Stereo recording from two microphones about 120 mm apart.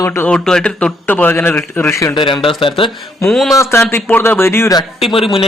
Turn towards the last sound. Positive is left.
turn(degrees=50)  # may be behind; listen again after turning